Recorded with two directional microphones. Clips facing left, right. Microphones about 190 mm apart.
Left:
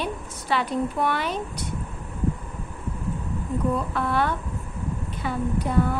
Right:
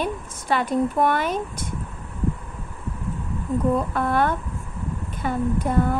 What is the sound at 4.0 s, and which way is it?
Speech, 50° right (ahead or behind).